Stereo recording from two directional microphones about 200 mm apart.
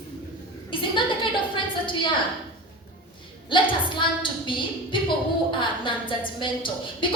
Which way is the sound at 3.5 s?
25° left (ahead or behind).